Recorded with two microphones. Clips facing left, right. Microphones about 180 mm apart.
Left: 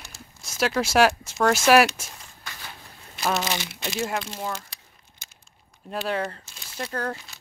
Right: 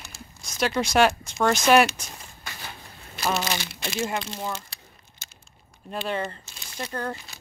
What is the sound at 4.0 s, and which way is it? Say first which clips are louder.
Speech: even; 5° left (ahead or behind).